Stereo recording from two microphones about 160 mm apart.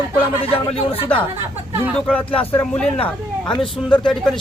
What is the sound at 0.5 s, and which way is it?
Speech, 35° left (ahead or behind).